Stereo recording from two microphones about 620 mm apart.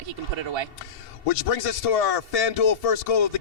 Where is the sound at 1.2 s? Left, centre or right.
Left.